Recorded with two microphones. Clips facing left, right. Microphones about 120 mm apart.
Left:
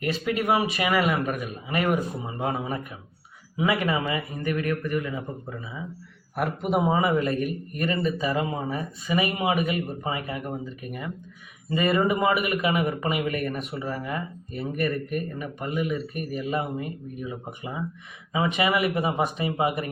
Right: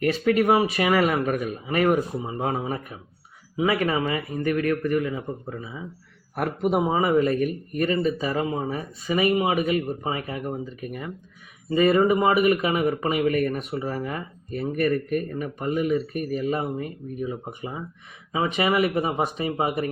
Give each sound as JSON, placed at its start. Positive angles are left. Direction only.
{"t": 0.0, "sound": "speech", "side_deg": -45}
{"t": 6.7, "sound": "speech", "side_deg": -30}
{"t": 11.7, "sound": "speech", "side_deg": -35}